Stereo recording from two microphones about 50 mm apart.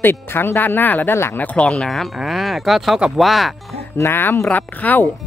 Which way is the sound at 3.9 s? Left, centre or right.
Left.